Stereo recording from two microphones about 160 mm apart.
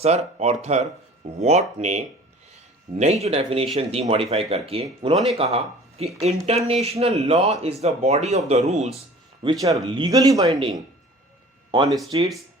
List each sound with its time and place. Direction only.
0.0 s speech: 40° right (ahead or behind)
5.1 s speech: centre (ahead or behind)
5.4 s speech: 40° right (ahead or behind)
9.4 s speech: 25° right (ahead or behind)
10.4 s speech: 35° right (ahead or behind)